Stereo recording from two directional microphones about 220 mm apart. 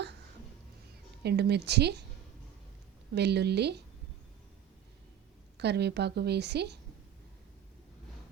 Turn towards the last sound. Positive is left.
turn(degrees=-50)  # may be behind; listen again after turning